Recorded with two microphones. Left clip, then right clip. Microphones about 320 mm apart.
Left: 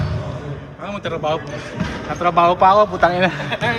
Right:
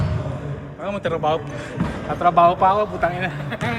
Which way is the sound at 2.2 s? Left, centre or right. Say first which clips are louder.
Left 1 dB; centre.